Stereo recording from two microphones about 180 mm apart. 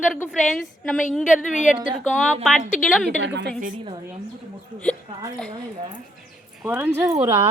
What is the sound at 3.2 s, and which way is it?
Speech, 75° right (ahead or behind).